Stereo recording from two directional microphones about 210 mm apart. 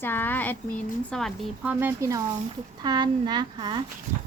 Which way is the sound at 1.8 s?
10° right (ahead or behind).